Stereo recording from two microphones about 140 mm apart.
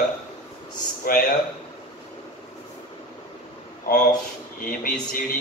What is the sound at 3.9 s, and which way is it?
Speech, 90° left.